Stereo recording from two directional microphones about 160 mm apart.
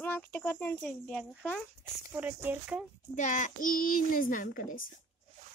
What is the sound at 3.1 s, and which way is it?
A child's voice, 50° left (ahead or behind).